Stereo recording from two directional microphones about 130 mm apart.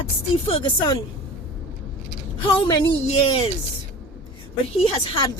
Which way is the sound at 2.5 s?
40° left (ahead or behind).